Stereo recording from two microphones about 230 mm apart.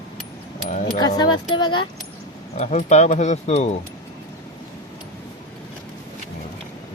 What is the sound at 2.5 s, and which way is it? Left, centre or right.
Speech, left.